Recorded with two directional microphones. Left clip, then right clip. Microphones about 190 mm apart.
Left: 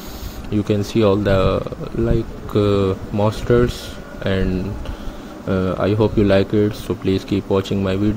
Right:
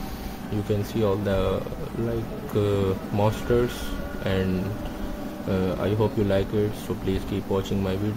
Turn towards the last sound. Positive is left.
turn(degrees=30)  # may be behind; listen again after turning